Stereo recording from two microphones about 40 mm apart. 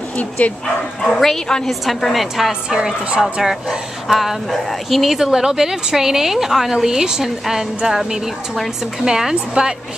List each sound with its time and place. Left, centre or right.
0.4 s speech: left
1.0 s a woman's voice: centre
3.2 s a woman's voice: centre